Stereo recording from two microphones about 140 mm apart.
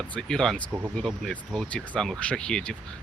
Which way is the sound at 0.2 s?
5° left (ahead or behind).